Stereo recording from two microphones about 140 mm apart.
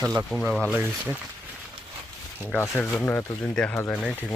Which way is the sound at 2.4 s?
15° left (ahead or behind).